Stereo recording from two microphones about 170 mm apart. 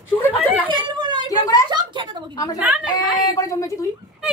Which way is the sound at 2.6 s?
5° right (ahead or behind).